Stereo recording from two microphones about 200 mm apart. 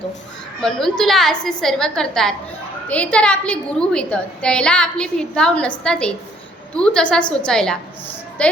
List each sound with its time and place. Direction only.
0.6 s a woman's voice: centre (ahead or behind)